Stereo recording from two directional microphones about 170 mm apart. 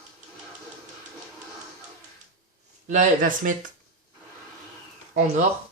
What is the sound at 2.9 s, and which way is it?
Speech, 50° right (ahead or behind).